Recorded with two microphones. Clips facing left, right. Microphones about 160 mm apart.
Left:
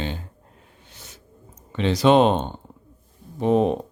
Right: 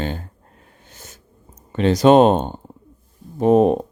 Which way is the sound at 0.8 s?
45° right (ahead or behind).